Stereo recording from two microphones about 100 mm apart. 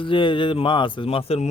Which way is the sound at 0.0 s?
55° left (ahead or behind).